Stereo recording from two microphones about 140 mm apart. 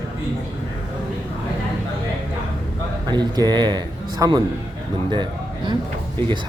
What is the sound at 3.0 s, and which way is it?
Speech, 30° right (ahead or behind).